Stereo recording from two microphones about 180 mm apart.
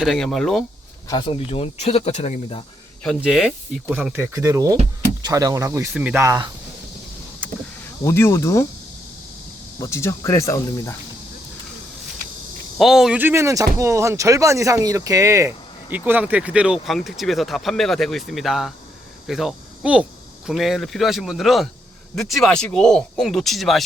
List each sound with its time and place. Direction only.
0.0 s speech: centre (ahead or behind)
1.0 s speech: 25° left (ahead or behind)
3.2 s speech: 5° right (ahead or behind)
6.0 s speech: 5° right (ahead or behind)
6.2 s speech: 20° right (ahead or behind)
7.4 s vehicle: 10° right (ahead or behind)
8.0 s speech: 15° left (ahead or behind)
9.8 s speech: 15° left (ahead or behind)
12.7 s speech: centre (ahead or behind)